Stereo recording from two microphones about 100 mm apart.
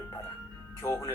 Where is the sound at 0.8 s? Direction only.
25° left (ahead or behind).